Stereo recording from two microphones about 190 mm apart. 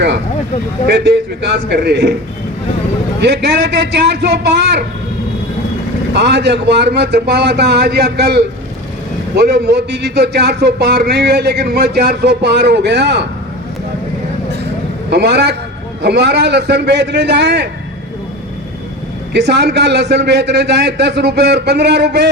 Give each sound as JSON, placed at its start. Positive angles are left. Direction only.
{"t": 0.9, "sound": "a man's voice", "side_deg": -65}
{"t": 3.2, "sound": "a man's voice", "side_deg": -60}
{"t": 6.1, "sound": "a man's voice", "side_deg": -65}
{"t": 15.1, "sound": "a man's voice", "side_deg": -60}
{"t": 19.3, "sound": "a man's voice", "side_deg": -60}